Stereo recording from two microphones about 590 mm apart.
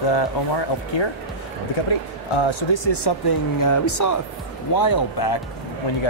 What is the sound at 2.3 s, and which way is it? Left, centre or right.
Speech, left.